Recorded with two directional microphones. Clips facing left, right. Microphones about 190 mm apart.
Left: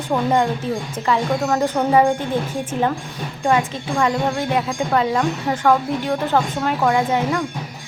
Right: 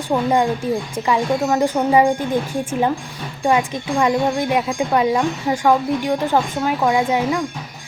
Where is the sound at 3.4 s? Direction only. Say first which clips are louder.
Right 1 dB; 15° right (ahead or behind).